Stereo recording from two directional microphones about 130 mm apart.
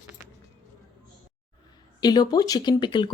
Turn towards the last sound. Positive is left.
turn(degrees=35)  # may be behind; listen again after turning